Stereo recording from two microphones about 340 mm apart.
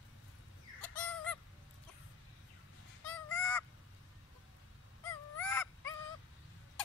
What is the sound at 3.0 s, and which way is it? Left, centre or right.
Goose, centre.